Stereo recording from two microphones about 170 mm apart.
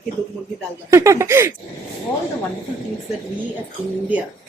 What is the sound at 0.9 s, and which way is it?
Speech, 15° right (ahead or behind).